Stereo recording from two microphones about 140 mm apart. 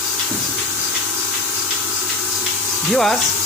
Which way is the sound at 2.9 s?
Centre (ahead or behind).